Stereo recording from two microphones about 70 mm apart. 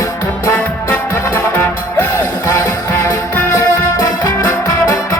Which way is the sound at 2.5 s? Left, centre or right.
Left.